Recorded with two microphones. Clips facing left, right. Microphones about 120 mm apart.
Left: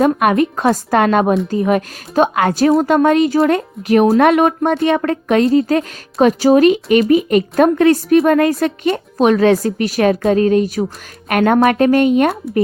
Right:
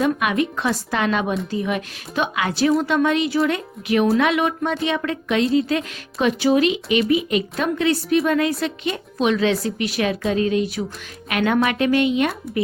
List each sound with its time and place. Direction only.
0.0 s speech: 45° left (ahead or behind)